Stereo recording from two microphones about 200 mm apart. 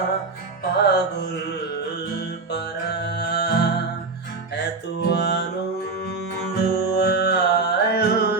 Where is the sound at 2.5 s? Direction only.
55° left (ahead or behind).